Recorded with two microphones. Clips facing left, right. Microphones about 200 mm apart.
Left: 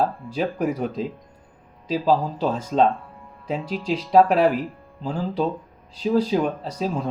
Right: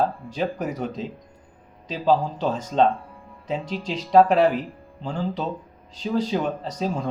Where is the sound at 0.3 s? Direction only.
10° left (ahead or behind).